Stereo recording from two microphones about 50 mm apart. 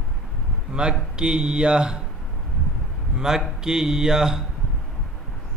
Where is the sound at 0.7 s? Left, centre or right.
Centre.